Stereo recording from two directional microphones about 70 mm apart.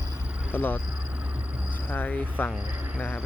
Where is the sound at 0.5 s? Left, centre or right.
Left.